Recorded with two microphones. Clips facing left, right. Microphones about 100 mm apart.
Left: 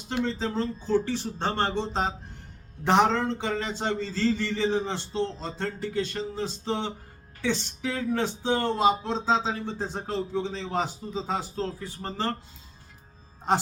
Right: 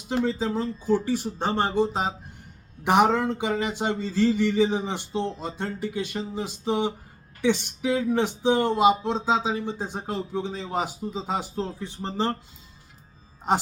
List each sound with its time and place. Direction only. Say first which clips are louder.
0.3 s speech: right 2 dB; 10° right (ahead or behind)
13.5 s speech: right 1 dB; 15° right (ahead or behind)